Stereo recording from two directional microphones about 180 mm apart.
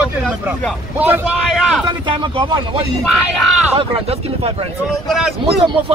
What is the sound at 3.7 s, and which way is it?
Speech, 35° right (ahead or behind).